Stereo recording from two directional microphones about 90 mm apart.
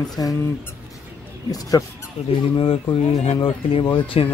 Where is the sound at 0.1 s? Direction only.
40° left (ahead or behind).